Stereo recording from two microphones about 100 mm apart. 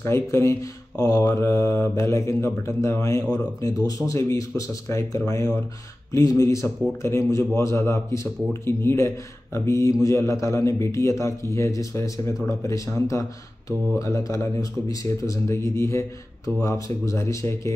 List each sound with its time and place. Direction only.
0.0 s speech: 25° left (ahead or behind)